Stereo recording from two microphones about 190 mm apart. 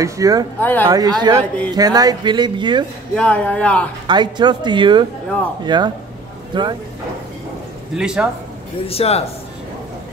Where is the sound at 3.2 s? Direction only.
5° left (ahead or behind).